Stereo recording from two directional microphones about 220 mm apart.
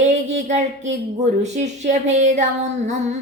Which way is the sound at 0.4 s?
35° right (ahead or behind).